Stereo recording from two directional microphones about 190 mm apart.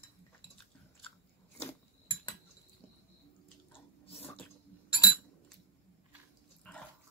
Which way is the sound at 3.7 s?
30° left (ahead or behind).